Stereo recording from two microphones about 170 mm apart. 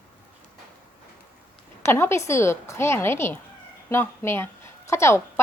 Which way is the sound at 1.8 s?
15° left (ahead or behind).